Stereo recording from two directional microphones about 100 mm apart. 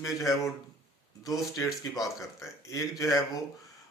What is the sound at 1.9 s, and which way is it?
Speech, centre (ahead or behind).